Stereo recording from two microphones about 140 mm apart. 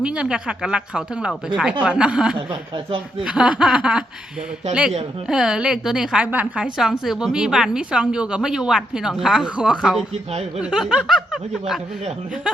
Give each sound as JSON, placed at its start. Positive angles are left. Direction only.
{"t": 0.0, "sound": "speech", "side_deg": -5}
{"t": 2.5, "sound": "speech", "side_deg": -35}
{"t": 3.2, "sound": "a woman's voice", "side_deg": -5}